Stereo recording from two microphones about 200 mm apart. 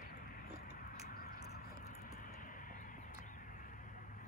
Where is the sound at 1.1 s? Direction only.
50° left (ahead or behind).